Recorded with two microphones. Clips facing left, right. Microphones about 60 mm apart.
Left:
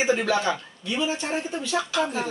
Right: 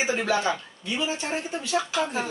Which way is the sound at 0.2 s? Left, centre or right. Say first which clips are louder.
Left 1 dB; centre.